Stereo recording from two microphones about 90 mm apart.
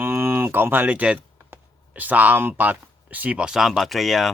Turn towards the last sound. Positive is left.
turn(degrees=0)  # may be behind; listen again after turning